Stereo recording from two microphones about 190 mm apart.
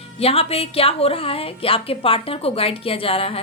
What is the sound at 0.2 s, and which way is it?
A woman's voice, 30° left (ahead or behind).